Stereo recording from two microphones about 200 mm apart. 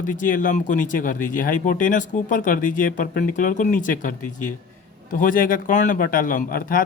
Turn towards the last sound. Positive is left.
turn(degrees=45)  # may be behind; listen again after turning